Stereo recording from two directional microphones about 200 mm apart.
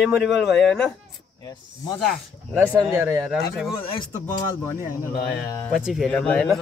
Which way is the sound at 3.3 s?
5° right (ahead or behind).